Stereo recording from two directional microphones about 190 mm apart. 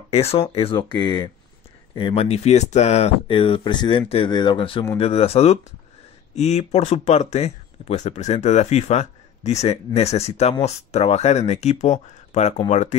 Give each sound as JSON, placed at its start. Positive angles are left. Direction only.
{"t": 0.1, "sound": "speech", "side_deg": 30}